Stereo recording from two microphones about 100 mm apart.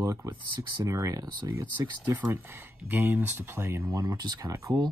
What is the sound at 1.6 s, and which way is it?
Speech, 20° right (ahead or behind).